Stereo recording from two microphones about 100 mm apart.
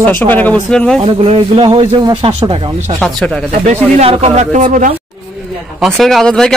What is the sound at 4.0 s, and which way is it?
Speech, 80° right.